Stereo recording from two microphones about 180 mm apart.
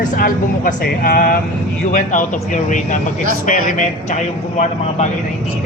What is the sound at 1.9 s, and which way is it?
Speech, 45° left (ahead or behind).